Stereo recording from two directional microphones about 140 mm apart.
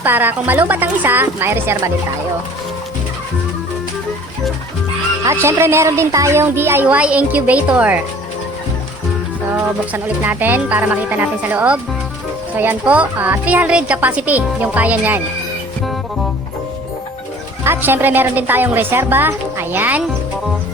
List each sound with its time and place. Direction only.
0.0 s speech: 15° right (ahead or behind)
5.2 s speech: 20° right (ahead or behind)
9.9 s speech: 10° right (ahead or behind)
17.6 s speech: 15° right (ahead or behind)